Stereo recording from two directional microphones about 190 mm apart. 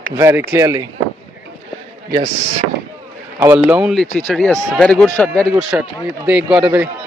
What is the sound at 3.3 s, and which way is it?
Speech, 15° right (ahead or behind).